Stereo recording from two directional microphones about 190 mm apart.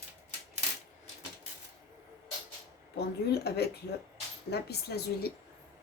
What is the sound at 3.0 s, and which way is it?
A woman's voice, 60° left (ahead or behind).